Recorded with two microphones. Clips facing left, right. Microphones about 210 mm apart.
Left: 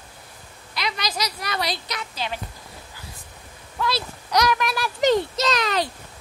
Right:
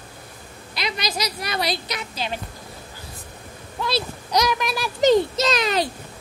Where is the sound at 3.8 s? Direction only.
20° right (ahead or behind).